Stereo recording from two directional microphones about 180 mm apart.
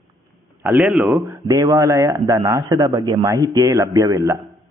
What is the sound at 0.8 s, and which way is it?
Speech, centre (ahead or behind).